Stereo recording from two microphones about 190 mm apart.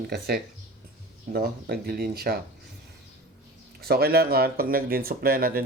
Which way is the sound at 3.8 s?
55° right (ahead or behind).